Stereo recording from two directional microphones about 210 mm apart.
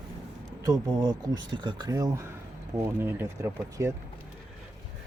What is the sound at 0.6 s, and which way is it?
Speech, 15° right (ahead or behind).